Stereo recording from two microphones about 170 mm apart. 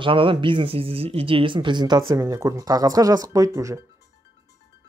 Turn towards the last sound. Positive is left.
turn(degrees=-20)  # may be behind; listen again after turning